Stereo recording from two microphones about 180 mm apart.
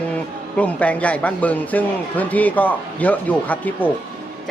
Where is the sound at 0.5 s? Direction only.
10° left (ahead or behind).